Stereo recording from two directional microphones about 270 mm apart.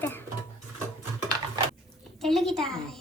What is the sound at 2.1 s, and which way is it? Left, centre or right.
Speech, centre.